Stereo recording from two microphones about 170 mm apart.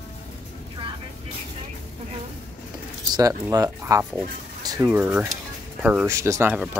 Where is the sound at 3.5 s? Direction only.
20° right (ahead or behind).